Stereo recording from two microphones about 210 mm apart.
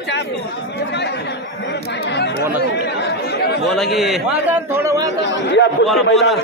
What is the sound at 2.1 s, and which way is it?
Speech, 55° left (ahead or behind).